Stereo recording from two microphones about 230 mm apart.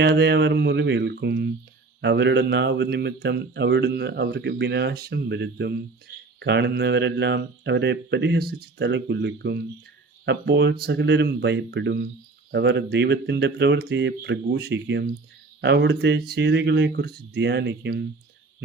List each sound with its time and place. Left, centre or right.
0.0 s speech: right